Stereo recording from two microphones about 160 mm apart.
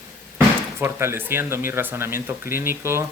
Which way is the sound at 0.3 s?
15° right (ahead or behind).